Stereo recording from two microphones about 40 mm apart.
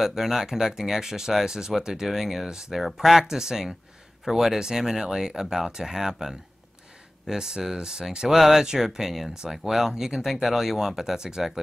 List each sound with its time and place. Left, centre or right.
0.0 s speech: centre